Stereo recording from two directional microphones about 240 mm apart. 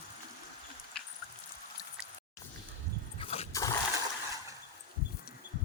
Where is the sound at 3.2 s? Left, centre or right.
Left.